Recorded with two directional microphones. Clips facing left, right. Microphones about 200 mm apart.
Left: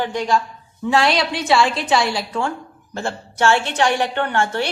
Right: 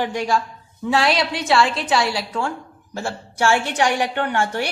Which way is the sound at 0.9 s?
Centre (ahead or behind).